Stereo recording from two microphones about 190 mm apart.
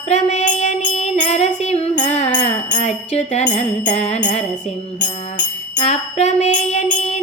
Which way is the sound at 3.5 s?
40° left (ahead or behind).